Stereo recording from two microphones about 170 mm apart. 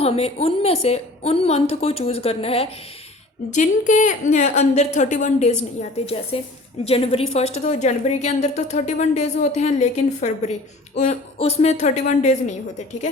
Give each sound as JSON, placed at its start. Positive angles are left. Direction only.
{"t": 0.0, "sound": "a woman's voice", "side_deg": 35}
{"t": 3.5, "sound": "a woman's voice", "side_deg": 45}